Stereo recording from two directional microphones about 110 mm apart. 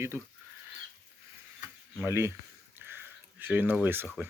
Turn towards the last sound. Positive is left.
turn(degrees=-20)  # may be behind; listen again after turning